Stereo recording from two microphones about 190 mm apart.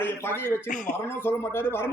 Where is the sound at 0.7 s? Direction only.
45° left (ahead or behind).